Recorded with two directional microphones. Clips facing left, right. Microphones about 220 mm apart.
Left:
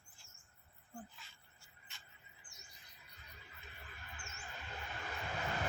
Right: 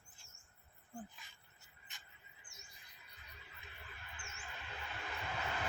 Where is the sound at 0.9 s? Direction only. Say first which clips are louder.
Right 2 dB; 15° right (ahead or behind).